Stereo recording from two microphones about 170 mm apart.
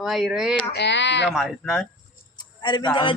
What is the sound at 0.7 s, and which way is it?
Speech, 85° left.